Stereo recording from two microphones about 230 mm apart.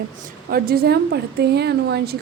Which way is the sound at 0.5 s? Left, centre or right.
Right.